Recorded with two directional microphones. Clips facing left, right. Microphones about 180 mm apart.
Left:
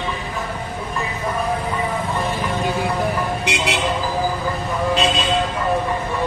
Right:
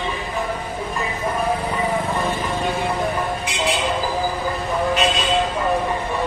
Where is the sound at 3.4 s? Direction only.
70° left (ahead or behind).